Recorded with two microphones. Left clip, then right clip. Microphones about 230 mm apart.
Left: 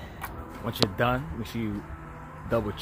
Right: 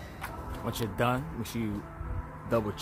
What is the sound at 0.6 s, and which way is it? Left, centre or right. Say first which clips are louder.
Speech: left 4 dB; centre.